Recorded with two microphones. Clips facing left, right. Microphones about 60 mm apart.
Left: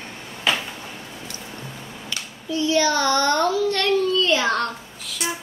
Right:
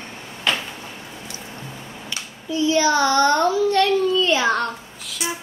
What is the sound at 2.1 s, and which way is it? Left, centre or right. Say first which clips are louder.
Child singing: even; centre.